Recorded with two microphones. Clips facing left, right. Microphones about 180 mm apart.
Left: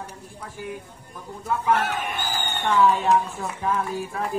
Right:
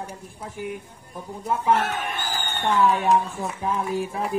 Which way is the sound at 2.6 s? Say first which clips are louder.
Left 1 dB; 15° right (ahead or behind).